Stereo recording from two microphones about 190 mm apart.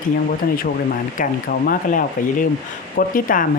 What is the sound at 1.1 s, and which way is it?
Speech, 45° left (ahead or behind).